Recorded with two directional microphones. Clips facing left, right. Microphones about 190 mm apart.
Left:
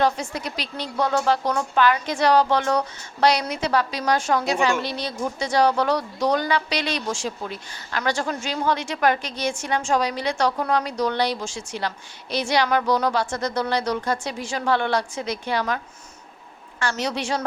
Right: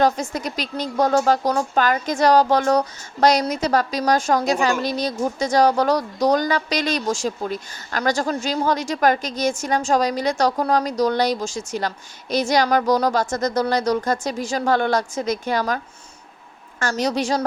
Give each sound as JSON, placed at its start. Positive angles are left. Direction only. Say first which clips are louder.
{"t": 0.0, "sound": "speech", "louder": "right 3 dB", "side_deg": -45}
{"t": 16.8, "sound": "speech", "louder": "right 4 dB", "side_deg": -40}